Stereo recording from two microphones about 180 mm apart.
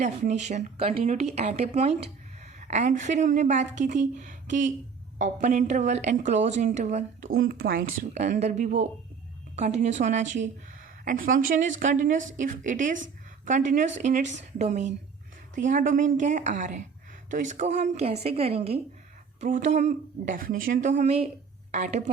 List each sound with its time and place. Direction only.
0.0 s a woman's voice: 40° right (ahead or behind)
19.4 s a woman's voice: 45° right (ahead or behind)